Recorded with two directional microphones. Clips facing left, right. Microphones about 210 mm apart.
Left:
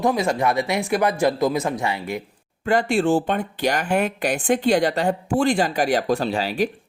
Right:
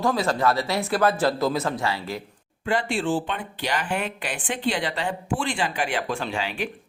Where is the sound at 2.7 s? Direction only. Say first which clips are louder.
Left 5 dB; 45° left (ahead or behind).